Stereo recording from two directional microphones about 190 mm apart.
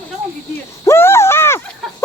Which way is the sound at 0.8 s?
15° left (ahead or behind).